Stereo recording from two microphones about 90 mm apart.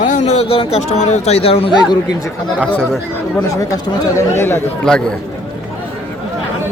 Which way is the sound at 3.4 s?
35° left (ahead or behind).